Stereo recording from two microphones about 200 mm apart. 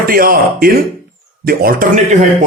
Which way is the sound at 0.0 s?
45° right (ahead or behind).